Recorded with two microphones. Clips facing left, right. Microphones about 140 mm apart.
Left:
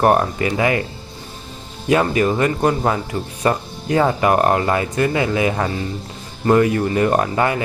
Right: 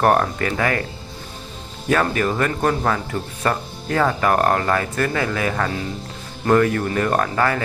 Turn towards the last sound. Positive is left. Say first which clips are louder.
# left 2 dB
turn(degrees=15)  # may be behind; listen again after turning